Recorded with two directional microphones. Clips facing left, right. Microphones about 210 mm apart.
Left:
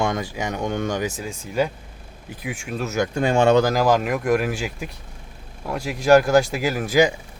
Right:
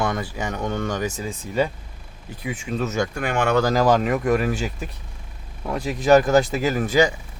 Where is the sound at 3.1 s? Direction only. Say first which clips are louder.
Left 5 dB; 25° left (ahead or behind).